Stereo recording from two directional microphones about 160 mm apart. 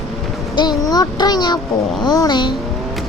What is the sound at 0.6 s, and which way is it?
Speech, 25° left (ahead or behind).